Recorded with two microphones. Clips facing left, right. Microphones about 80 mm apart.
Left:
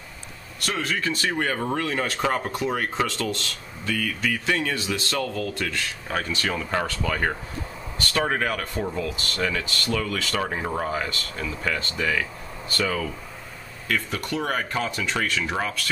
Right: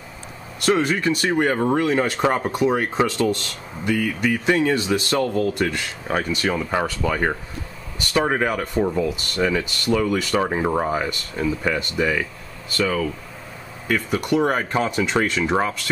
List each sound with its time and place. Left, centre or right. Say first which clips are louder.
0.7 s speech: right 8 dB; right
12.7 s speech: right 4 dB; centre
13.8 s speech: right 6 dB; centre